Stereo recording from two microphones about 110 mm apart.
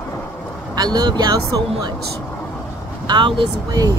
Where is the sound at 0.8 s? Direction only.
40° right (ahead or behind).